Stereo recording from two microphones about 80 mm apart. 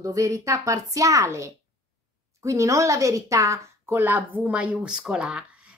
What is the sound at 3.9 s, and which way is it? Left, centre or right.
Speech, right.